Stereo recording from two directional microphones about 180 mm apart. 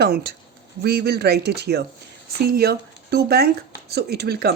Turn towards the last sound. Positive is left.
turn(degrees=-65)  # may be behind; listen again after turning